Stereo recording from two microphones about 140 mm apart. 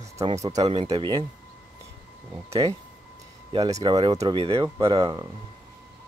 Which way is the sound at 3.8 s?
35° right (ahead or behind).